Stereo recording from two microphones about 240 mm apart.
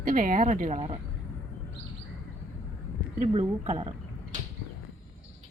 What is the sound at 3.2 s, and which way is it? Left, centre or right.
Speech, right.